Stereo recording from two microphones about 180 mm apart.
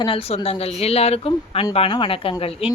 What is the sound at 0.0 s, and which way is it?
A woman's voice, 30° left (ahead or behind).